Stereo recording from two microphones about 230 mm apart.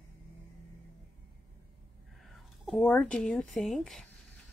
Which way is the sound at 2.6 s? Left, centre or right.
Centre.